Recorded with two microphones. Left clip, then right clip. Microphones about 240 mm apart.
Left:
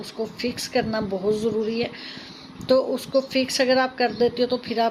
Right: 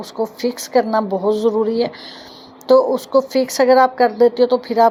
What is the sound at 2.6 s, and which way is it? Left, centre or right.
Speech, centre.